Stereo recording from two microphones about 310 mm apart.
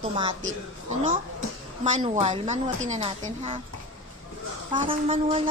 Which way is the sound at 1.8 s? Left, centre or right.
Centre.